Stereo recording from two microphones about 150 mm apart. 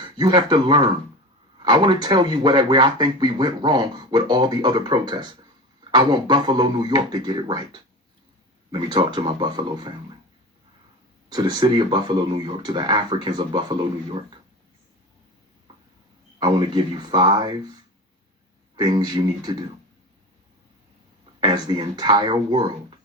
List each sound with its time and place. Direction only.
0.0 s speech: 30° right (ahead or behind)
11.3 s speech: 25° right (ahead or behind)
16.4 s speech: 30° right (ahead or behind)
18.8 s speech: 30° right (ahead or behind)
21.4 s speech: 30° right (ahead or behind)